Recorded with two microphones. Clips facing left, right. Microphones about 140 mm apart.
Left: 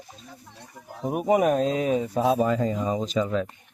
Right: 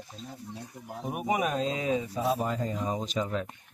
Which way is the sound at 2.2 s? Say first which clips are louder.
Left 8 dB; 90° left.